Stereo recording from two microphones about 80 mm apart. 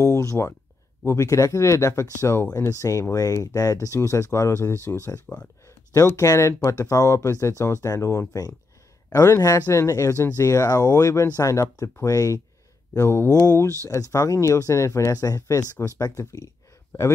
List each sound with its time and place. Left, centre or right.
0.0 s speech: left
5.9 s speech: left